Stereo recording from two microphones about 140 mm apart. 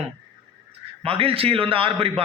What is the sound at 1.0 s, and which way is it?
A man's voice, 40° right (ahead or behind).